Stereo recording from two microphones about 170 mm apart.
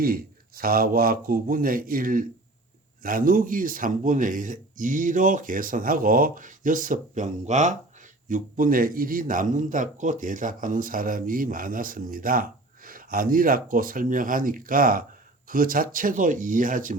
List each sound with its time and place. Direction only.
0.0 s a man's voice: 60° right (ahead or behind)